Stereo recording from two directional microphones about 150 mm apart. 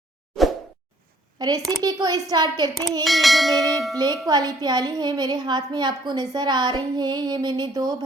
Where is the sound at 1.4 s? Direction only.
25° right (ahead or behind).